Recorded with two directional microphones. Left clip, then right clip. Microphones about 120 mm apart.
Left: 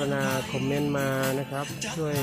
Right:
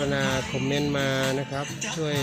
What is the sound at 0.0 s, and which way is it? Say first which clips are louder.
Speech: right 2 dB; 25° right (ahead or behind).